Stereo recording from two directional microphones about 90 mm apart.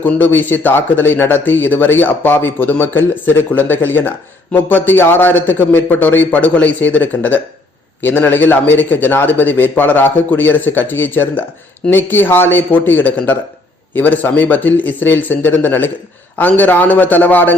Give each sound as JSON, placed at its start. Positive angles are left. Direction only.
{"t": 0.0, "sound": "a man's voice", "side_deg": 20}